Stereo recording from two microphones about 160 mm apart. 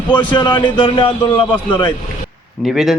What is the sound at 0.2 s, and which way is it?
A man's voice, 30° left (ahead or behind).